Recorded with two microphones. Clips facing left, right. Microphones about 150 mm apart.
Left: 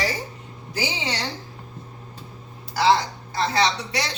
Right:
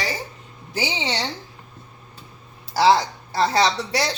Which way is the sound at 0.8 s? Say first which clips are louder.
Right 2 dB; 25° right (ahead or behind).